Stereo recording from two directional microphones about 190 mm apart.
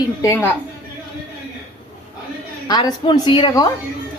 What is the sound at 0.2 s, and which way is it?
Speech, 15° left (ahead or behind).